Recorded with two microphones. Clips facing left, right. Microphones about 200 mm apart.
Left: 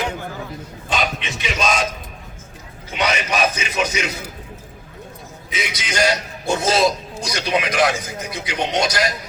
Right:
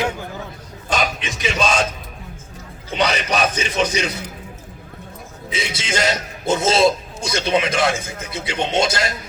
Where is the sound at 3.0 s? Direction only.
30° right (ahead or behind).